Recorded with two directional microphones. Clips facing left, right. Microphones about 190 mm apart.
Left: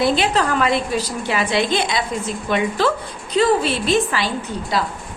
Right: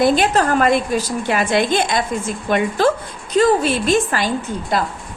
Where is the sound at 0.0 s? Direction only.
50° right (ahead or behind).